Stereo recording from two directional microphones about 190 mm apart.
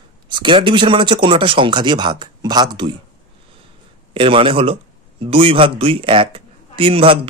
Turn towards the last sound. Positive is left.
turn(degrees=-30)  # may be behind; listen again after turning